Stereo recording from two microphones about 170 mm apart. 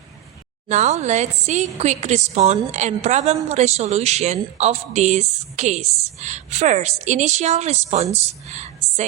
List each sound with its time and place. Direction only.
0.7 s speech: 40° right (ahead or behind)